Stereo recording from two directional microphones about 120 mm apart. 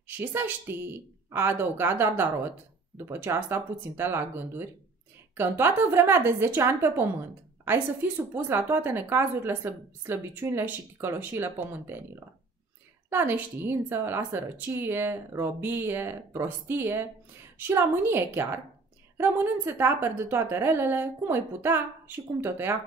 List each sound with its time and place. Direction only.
0.2 s a woman's voice: 15° right (ahead or behind)
13.1 s speech: 20° right (ahead or behind)